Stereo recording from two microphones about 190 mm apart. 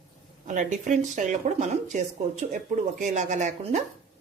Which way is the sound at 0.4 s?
40° right (ahead or behind).